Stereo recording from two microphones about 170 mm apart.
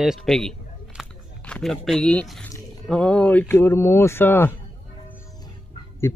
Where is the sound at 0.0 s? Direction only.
Centre (ahead or behind).